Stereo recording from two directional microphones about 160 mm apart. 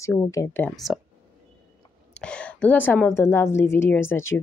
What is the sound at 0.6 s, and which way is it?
Speech, centre (ahead or behind).